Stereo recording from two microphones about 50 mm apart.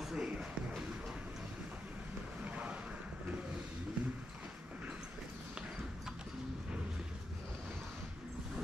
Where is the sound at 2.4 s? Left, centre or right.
Right.